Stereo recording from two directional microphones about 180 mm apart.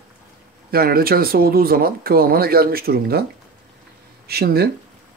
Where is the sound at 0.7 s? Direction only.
55° right (ahead or behind).